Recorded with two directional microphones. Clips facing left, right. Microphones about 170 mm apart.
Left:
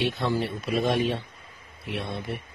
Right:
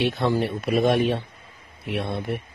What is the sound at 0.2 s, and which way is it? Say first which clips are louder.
Speech: right 4 dB; 60° right (ahead or behind).